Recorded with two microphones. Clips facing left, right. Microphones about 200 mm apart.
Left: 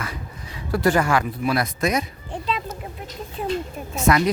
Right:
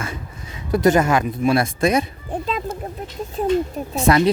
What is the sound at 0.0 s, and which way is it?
Speech, 25° right (ahead or behind).